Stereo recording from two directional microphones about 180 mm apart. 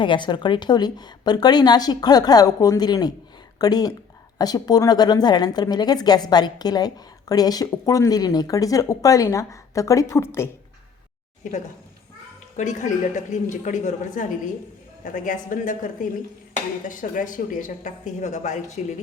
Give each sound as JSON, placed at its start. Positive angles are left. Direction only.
{"t": 0.0, "sound": "speech", "side_deg": 25}
{"t": 12.5, "sound": "speech", "side_deg": 45}